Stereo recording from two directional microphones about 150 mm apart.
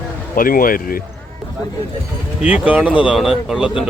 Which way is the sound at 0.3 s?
70° left (ahead or behind).